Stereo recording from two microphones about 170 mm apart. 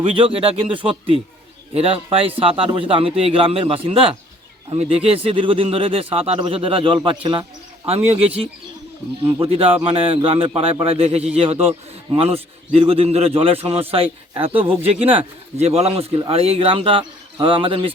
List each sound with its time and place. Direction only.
0.0 s speech: 30° right (ahead or behind)
9.4 s speech: 35° right (ahead or behind)